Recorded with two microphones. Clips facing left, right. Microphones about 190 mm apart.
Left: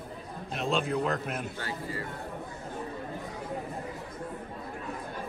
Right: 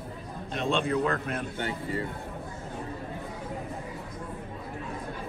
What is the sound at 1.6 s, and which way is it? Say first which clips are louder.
Speech: right 4 dB; 25° right (ahead or behind).